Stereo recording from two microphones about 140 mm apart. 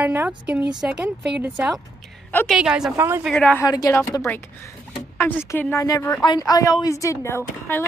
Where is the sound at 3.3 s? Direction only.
5° left (ahead or behind).